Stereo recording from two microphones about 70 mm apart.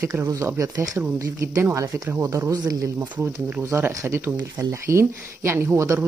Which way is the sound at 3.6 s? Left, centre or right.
Right.